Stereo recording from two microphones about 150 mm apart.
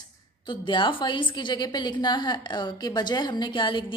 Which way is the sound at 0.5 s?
30° left (ahead or behind).